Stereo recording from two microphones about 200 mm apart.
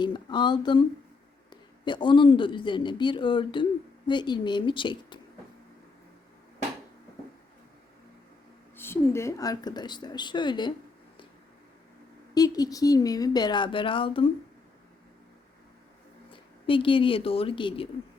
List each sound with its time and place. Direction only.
0.0 s speech: 20° left (ahead or behind)
8.7 s speech: 10° left (ahead or behind)
12.3 s speech: 20° left (ahead or behind)
16.3 s speech: 25° left (ahead or behind)